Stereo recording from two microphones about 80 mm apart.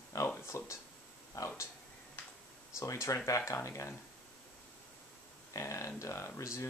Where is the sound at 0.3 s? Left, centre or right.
Left.